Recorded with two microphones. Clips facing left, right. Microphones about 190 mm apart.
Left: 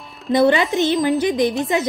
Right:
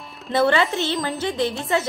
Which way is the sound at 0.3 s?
15° left (ahead or behind).